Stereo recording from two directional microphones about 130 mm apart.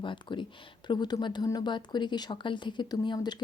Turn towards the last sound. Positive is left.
turn(degrees=35)  # may be behind; listen again after turning